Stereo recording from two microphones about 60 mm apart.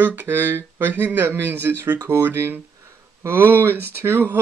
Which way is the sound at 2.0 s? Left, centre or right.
Right.